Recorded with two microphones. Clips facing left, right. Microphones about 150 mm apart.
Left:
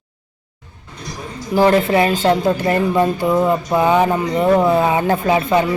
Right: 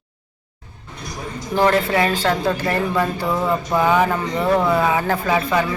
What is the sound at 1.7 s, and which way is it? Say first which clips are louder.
Speech: left 4 dB; 25° left (ahead or behind).